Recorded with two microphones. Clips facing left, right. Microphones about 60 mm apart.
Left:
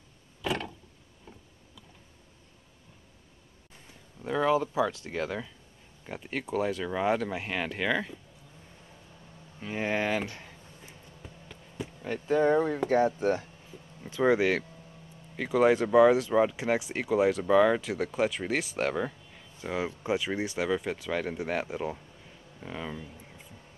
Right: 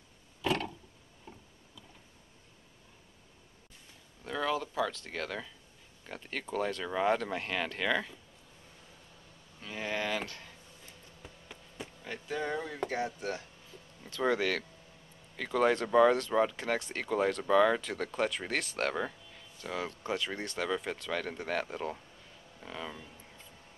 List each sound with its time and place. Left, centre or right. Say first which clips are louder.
4.2 s speech: left 7 dB; left
9.6 s a sound: left 6 dB; left
12.0 s speech: left 11 dB; left
14.0 s speech: left 6 dB; centre
19.3 s speech: left 5 dB; centre
22.6 s a sound: left 4 dB; centre